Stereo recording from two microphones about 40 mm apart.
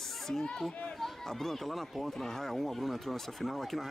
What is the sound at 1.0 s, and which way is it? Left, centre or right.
Speech, centre.